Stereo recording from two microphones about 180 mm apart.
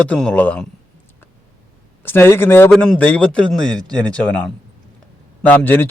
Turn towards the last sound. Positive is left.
turn(degrees=10)  # may be behind; listen again after turning